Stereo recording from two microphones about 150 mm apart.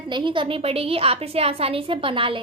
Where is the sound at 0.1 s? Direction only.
35° right (ahead or behind).